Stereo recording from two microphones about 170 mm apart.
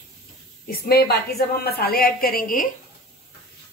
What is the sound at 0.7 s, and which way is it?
A woman's voice, 65° left (ahead or behind).